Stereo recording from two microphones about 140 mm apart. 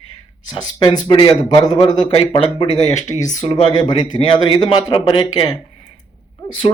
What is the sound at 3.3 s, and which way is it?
Speech, 60° left (ahead or behind).